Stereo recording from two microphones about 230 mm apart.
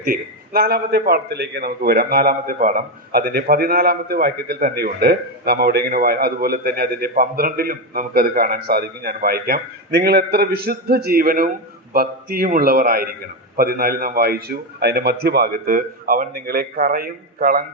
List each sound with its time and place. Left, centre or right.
0.0 s a man's voice: right